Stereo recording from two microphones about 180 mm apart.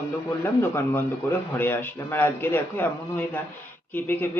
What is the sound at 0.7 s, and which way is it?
Speech, 10° left (ahead or behind).